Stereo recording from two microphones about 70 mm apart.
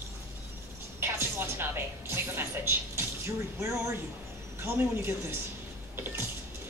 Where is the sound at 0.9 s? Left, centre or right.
Right.